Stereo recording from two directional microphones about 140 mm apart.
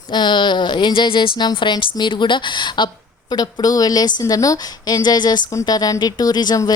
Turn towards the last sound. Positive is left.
turn(degrees=30)  # may be behind; listen again after turning